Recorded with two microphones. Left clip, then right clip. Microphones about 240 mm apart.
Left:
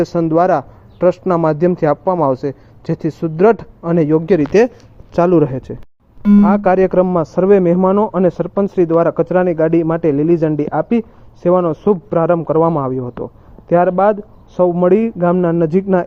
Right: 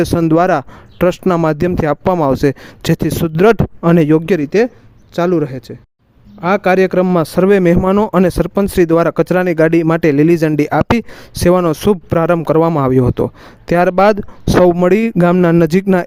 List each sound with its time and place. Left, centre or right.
0.0 s speech: right
4.6 s speech: centre
6.4 s speech: centre; by 16.0 s right